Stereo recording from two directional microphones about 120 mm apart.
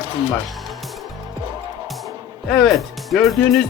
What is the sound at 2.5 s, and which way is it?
Music, centre (ahead or behind).